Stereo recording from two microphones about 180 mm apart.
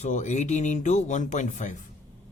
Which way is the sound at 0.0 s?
40° left (ahead or behind).